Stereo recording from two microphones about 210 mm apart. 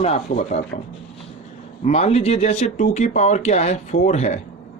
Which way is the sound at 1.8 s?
30° left (ahead or behind).